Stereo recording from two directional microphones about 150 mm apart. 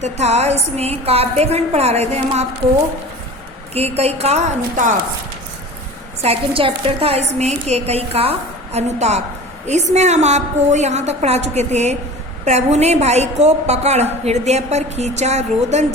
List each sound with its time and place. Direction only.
0.0 s a woman's voice: 45° right (ahead or behind)
3.8 s a woman's voice: 45° right (ahead or behind)
6.2 s a woman's voice: 40° right (ahead or behind)